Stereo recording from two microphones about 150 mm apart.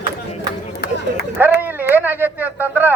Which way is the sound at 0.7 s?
90° left.